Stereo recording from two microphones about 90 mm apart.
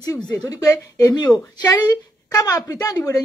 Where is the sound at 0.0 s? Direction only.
45° left (ahead or behind).